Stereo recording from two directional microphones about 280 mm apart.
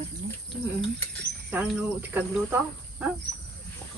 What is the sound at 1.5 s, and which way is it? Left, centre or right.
Speech, centre.